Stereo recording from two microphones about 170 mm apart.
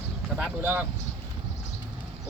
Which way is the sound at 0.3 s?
10° right (ahead or behind).